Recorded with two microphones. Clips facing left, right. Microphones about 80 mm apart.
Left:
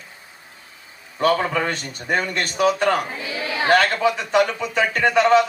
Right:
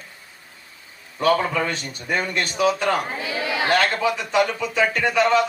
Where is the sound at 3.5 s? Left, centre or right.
Left.